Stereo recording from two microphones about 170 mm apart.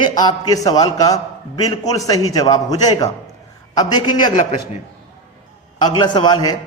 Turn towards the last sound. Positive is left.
turn(degrees=25)  # may be behind; listen again after turning